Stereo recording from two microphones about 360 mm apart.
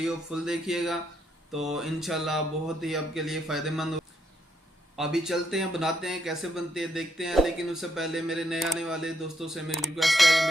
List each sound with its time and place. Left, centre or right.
0.0 s speech: centre
4.9 s speech: centre